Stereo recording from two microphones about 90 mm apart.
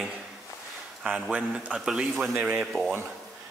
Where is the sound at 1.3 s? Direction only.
15° right (ahead or behind).